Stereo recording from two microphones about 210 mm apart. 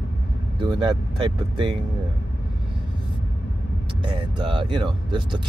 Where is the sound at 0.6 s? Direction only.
20° right (ahead or behind).